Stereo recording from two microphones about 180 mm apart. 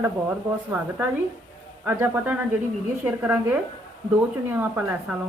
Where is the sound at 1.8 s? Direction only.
10° right (ahead or behind).